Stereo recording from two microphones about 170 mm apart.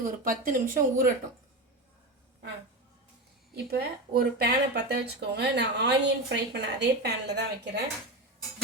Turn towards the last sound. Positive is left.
turn(degrees=-80)